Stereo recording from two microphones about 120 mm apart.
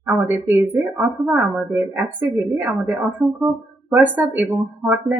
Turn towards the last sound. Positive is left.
turn(degrees=-15)  # may be behind; listen again after turning